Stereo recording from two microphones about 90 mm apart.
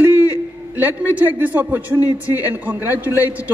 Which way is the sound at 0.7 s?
20° right (ahead or behind).